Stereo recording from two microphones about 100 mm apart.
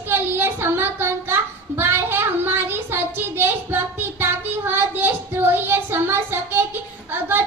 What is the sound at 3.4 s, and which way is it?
Child singing, 20° right (ahead or behind).